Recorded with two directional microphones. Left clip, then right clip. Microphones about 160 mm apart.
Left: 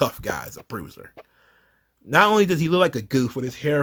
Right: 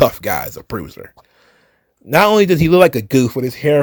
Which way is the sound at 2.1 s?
30° right (ahead or behind).